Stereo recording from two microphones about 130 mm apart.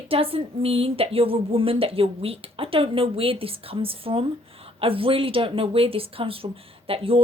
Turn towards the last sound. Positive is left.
turn(degrees=-45)  # may be behind; listen again after turning